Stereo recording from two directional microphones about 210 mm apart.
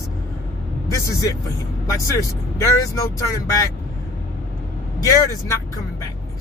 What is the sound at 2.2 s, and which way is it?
Speech, 15° left (ahead or behind).